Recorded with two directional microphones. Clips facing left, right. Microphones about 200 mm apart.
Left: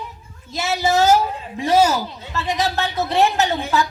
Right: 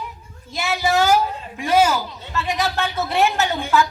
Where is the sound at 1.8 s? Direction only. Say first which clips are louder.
Even; 40° left (ahead or behind).